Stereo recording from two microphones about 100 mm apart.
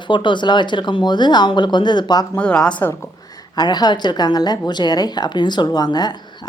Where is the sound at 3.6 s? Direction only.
45° left (ahead or behind).